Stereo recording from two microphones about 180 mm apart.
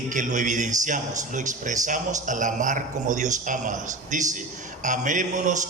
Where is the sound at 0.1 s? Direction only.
45° right (ahead or behind).